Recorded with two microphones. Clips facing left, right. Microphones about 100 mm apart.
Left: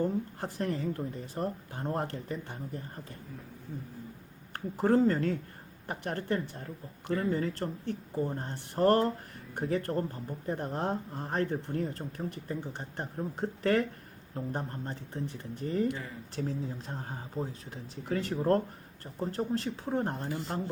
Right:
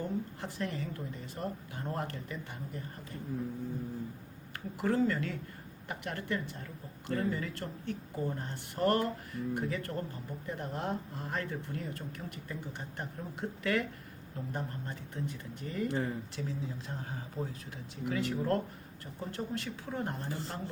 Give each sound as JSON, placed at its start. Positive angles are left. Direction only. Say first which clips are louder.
{"t": 0.0, "sound": "speech", "louder": "left 5 dB", "side_deg": 40}
{"t": 4.5, "sound": "speech", "louder": "left 5 dB", "side_deg": 35}
{"t": 15.9, "sound": "speech", "louder": "right 3 dB", "side_deg": -35}
{"t": 16.3, "sound": "speech", "louder": "left 4 dB", "side_deg": 40}